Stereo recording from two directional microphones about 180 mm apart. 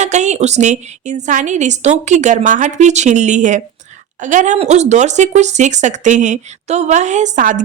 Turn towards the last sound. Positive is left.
turn(degrees=-45)  # may be behind; listen again after turning